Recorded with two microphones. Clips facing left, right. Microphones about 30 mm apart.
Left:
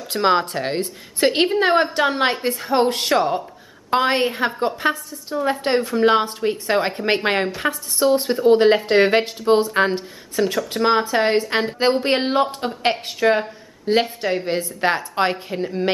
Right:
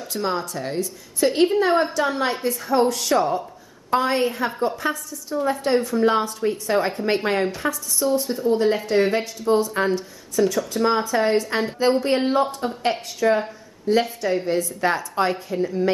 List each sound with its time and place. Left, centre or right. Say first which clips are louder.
0.0 s a woman's voice: left 7 dB; left
8.0 s a woman's voice: left 5 dB; left